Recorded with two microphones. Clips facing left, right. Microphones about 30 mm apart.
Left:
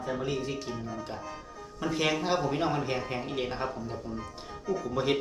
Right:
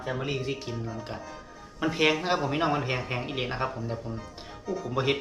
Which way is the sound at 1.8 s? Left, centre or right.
Centre.